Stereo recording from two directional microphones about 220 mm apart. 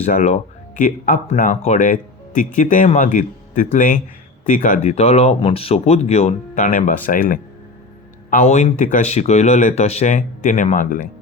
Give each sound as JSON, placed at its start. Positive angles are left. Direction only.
{"t": 0.0, "sound": "speech", "side_deg": 30}